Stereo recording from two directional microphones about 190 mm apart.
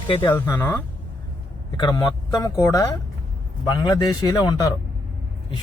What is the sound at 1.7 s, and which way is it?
A man's voice, 20° left (ahead or behind).